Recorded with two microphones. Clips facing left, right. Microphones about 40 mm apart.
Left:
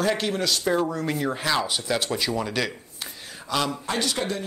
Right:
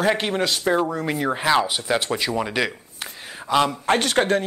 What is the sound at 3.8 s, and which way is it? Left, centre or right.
Speech, right.